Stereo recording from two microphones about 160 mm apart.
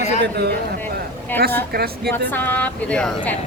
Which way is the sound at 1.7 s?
80° right.